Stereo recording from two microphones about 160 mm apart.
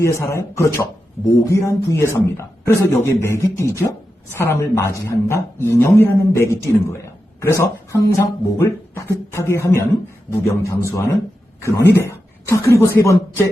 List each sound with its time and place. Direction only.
0.0 s a woman's voice: 20° left (ahead or behind)
12.0 s speech: 15° left (ahead or behind)